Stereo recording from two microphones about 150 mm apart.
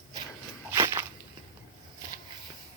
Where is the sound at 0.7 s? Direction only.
20° right (ahead or behind).